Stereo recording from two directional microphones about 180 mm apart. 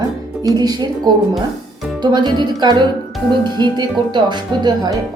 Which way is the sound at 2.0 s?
25° right (ahead or behind).